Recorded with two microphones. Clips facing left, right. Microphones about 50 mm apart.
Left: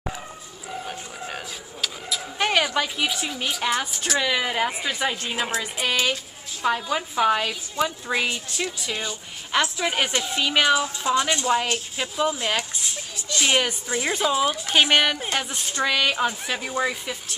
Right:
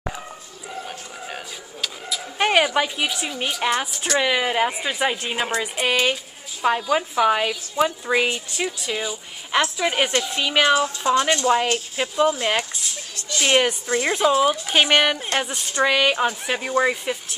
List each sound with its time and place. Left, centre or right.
0.7 s vehicle: centre
2.3 s speech: centre
3.1 s a woman's voice: centre
4.2 s a woman's voice: centre
13.1 s a sound: centre
13.8 s a woman's voice: centre
15.7 s speech: centre